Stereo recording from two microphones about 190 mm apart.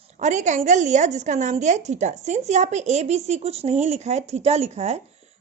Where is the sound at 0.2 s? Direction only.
40° right (ahead or behind).